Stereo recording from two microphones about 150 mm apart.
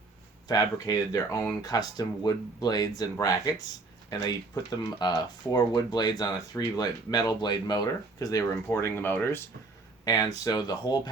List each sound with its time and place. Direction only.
0.4 s speech: 25° left (ahead or behind)
4.7 s speech: 30° left (ahead or behind)
10.0 s speech: 25° left (ahead or behind)